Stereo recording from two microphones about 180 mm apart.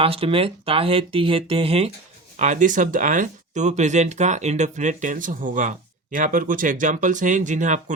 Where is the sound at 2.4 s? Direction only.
45° right (ahead or behind).